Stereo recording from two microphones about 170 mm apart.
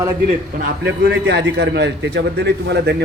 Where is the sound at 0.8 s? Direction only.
90° right.